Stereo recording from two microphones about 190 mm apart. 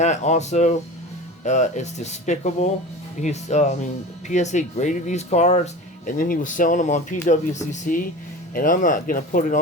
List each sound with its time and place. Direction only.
0.0 s speech: 40° left (ahead or behind)